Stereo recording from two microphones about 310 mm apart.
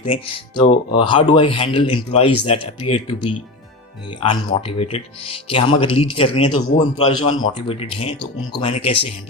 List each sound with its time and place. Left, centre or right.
0.0 s speech: centre